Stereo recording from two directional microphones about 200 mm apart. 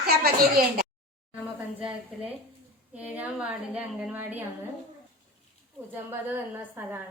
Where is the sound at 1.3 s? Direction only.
5° right (ahead or behind).